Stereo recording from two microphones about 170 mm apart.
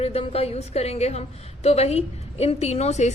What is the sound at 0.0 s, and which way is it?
A woman's voice, 35° left (ahead or behind).